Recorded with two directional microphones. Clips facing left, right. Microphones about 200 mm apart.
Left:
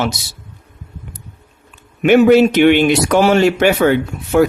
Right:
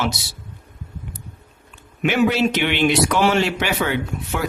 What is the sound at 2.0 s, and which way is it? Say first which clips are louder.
A man's voice: left 9 dB; 50° left (ahead or behind).